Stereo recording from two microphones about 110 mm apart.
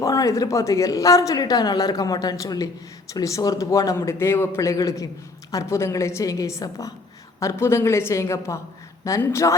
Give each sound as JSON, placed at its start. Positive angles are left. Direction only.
{"t": 0.0, "sound": "a woman's voice", "side_deg": 30}